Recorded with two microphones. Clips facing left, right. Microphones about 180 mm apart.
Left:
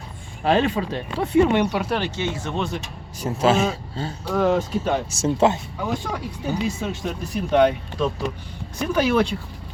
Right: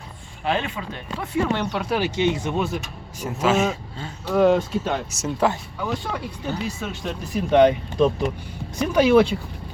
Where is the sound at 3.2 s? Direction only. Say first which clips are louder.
Left 1 dB; 30° left (ahead or behind).